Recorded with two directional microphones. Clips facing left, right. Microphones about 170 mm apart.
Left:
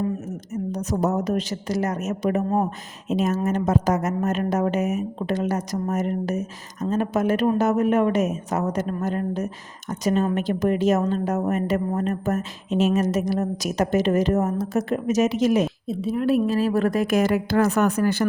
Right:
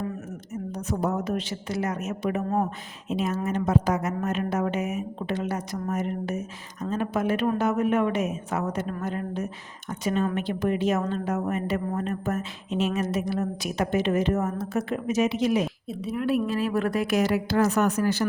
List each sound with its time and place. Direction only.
0.5 s a woman's voice: 40° left (ahead or behind)
15.9 s a woman's voice: 30° left (ahead or behind); by 18.3 s 55° left (ahead or behind)